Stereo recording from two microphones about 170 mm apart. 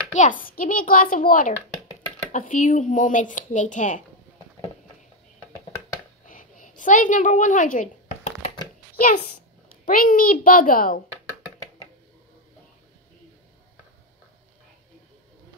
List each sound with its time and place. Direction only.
0.1 s a child's voice: 50° left (ahead or behind)
6.2 s a sound: 50° left (ahead or behind)
8.9 s a child's voice: 60° left (ahead or behind)